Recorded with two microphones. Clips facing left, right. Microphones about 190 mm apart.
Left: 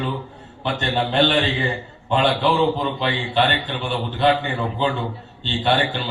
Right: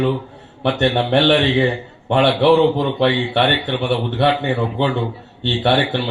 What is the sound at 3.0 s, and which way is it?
A man's voice, 65° right (ahead or behind).